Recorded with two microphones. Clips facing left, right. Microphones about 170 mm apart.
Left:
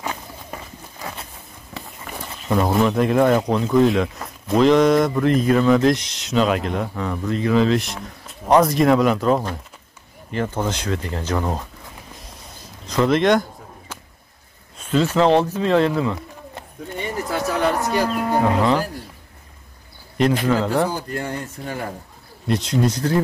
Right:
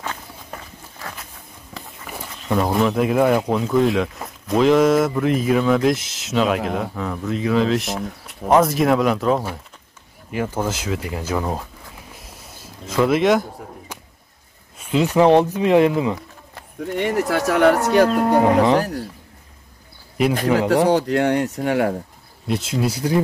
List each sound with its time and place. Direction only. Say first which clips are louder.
0.0 s walk: left 2 dB; 15° left (ahead or behind)
1.7 s speech: left 1 dB; centre (ahead or behind)
12.8 s speech: even; 5° right (ahead or behind)
13.9 s a sound: right 1 dB; 15° right (ahead or behind)
14.8 s speech: right 2 dB; 15° right (ahead or behind)
16.8 s speech: right 7 dB; 75° right (ahead or behind)
18.4 s speech: right 1 dB; 20° right (ahead or behind)
20.8 s speech: right 7 dB; 75° right (ahead or behind)
22.5 s speech: left 2 dB; 5° right (ahead or behind)